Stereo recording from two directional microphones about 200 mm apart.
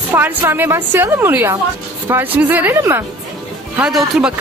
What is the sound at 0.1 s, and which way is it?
Speech, 10° right (ahead or behind).